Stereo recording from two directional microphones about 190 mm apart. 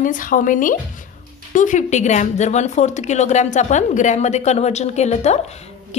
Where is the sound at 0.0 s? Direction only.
45° left (ahead or behind).